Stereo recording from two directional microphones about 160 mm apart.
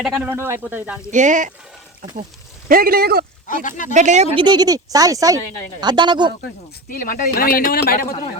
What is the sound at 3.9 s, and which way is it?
Speech, 45° right (ahead or behind).